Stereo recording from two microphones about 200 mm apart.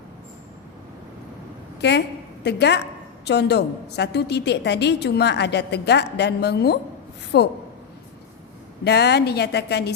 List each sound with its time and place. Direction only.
1.8 s a woman's voice: 55° left (ahead or behind)
8.8 s a woman's voice: 55° left (ahead or behind)